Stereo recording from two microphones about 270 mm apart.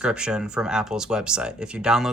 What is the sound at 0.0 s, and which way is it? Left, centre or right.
Speech, centre.